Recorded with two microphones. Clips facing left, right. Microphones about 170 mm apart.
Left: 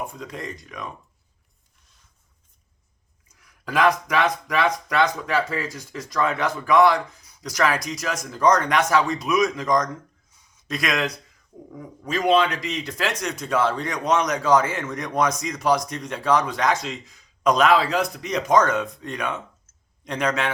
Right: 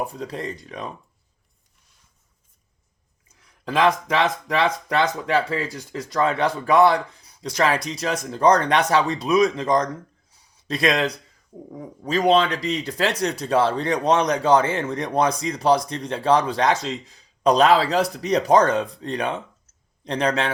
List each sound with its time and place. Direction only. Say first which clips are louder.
0.0 s speech: right 4 dB; 35° right (ahead or behind)
3.2 s speech: right 3 dB; 25° right (ahead or behind)
10.3 s a sound: right 2 dB; 35° right (ahead or behind)
11.7 s speech: right 4 dB; 30° right (ahead or behind)